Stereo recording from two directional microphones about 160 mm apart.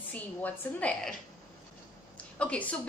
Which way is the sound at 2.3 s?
10° left (ahead or behind).